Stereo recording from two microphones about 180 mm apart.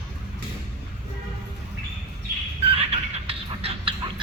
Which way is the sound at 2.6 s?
35° right (ahead or behind).